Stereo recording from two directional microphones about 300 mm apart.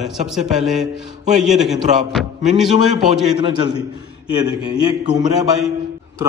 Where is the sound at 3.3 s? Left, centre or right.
Centre.